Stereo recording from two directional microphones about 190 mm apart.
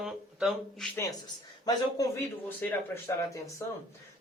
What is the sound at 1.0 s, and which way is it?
Speech, 20° left (ahead or behind).